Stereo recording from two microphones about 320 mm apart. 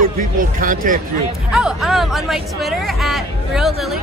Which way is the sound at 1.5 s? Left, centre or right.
Centre.